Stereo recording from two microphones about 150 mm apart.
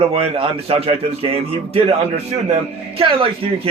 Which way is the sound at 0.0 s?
40° right (ahead or behind).